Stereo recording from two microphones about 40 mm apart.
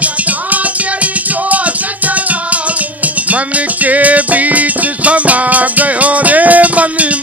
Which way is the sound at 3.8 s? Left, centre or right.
Right.